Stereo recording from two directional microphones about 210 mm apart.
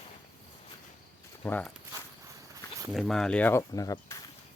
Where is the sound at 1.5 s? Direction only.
5° left (ahead or behind).